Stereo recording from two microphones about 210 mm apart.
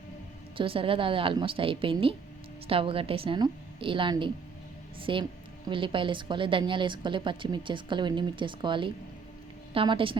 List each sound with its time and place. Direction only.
0.5 s a woman's voice: 25° right (ahead or behind)